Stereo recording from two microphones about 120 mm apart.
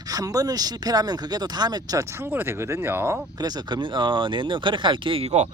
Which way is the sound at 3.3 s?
35° right (ahead or behind).